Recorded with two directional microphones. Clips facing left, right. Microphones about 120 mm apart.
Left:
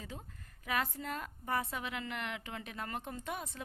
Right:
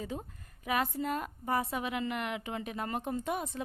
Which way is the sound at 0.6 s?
15° right (ahead or behind).